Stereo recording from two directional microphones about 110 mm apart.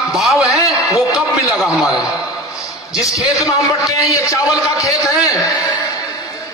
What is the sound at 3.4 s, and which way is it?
A man's voice, 30° left (ahead or behind).